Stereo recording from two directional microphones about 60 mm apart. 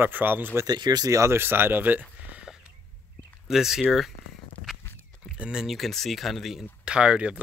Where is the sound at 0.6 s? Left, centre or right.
Right.